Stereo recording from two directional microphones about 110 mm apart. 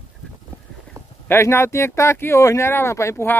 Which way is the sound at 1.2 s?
20° left (ahead or behind).